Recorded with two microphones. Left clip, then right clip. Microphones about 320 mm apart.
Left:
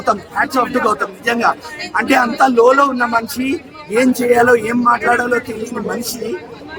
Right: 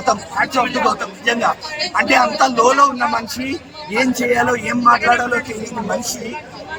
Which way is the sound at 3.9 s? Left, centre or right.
Centre.